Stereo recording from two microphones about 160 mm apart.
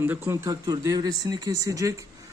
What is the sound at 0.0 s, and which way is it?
Speech, 15° right (ahead or behind).